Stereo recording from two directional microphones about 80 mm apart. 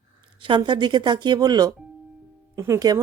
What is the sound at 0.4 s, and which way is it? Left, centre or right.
Speech, right.